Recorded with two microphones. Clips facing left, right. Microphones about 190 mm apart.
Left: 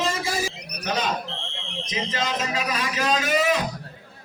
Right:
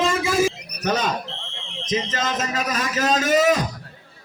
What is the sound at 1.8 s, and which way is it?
A man's voice, 45° right (ahead or behind).